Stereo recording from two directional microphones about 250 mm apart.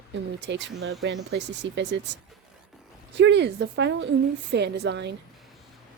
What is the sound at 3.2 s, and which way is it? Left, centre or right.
A woman's voice, right.